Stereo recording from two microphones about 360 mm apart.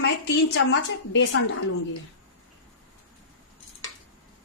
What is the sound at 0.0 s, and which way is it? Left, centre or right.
A woman's voice, left.